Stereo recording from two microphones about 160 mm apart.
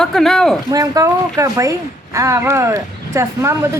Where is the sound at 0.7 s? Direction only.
20° right (ahead or behind).